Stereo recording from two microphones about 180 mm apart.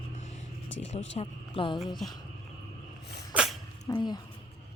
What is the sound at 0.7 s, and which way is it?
Speech, 90° left.